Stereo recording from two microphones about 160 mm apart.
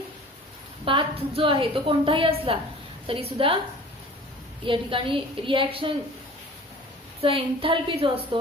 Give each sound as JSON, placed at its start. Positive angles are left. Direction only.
{"t": 0.9, "sound": "a woman's voice", "side_deg": -35}
{"t": 4.6, "sound": "a woman's voice", "side_deg": -30}
{"t": 7.2, "sound": "a woman's voice", "side_deg": -35}